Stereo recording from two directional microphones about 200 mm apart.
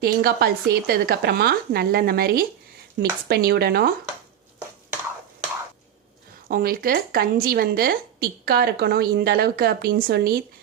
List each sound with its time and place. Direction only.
0.0 s a woman's voice: 50° right (ahead or behind)
6.5 s a woman's voice: 45° right (ahead or behind)